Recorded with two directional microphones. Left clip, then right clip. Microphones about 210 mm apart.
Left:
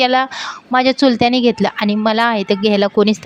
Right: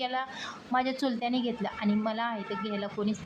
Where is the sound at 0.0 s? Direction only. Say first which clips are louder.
Left 18 dB; 45° left (ahead or behind).